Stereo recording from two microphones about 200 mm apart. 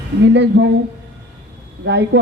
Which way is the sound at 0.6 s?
60° right (ahead or behind).